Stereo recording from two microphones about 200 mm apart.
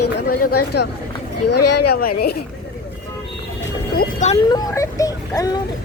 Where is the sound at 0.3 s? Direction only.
55° left (ahead or behind).